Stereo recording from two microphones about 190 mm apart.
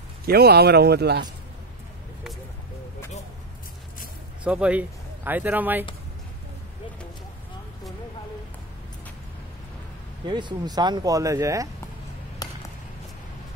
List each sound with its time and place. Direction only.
0.2 s speech: 55° right (ahead or behind)
4.5 s speech: 5° right (ahead or behind)
10.2 s speech: 25° right (ahead or behind)